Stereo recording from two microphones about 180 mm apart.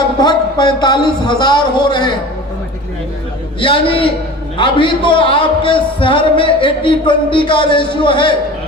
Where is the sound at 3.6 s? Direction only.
30° left (ahead or behind).